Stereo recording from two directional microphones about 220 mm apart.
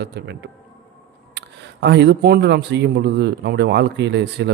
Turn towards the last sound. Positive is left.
turn(degrees=-50)  # may be behind; listen again after turning